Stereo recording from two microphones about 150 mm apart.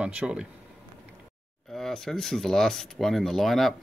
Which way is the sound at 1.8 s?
5° left (ahead or behind).